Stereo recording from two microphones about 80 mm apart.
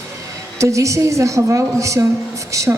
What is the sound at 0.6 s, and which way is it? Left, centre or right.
A woman's voice, right.